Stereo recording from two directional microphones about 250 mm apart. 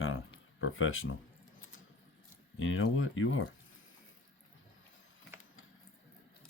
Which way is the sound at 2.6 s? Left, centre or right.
Left.